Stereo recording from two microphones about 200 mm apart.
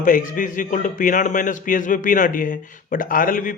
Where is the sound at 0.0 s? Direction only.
40° left (ahead or behind).